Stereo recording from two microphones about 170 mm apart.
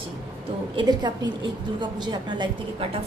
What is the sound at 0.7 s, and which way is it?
A woman's voice, 25° right (ahead or behind).